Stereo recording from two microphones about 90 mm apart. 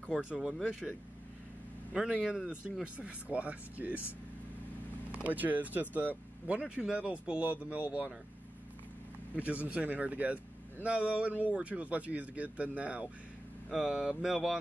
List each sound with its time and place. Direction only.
0.2 s speech: 10° right (ahead or behind)
2.0 s speech: 5° right (ahead or behind)
5.2 s speech: 15° right (ahead or behind)
9.3 s speech: 15° right (ahead or behind)